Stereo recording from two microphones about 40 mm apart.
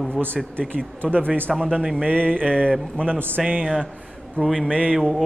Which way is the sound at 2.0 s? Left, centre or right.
Right.